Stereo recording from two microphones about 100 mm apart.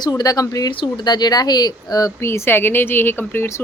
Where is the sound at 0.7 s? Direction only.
55° left (ahead or behind).